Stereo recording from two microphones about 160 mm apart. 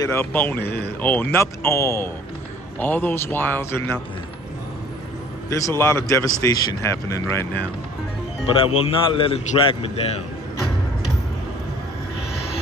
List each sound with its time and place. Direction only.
0.0 s a man's voice: 15° left (ahead or behind)
0.7 s speech: 90° left
1.0 s a man's voice: 10° left (ahead or behind)
5.5 s a man's voice: 20° left (ahead or behind)
8.5 s a man's voice: 35° left (ahead or behind)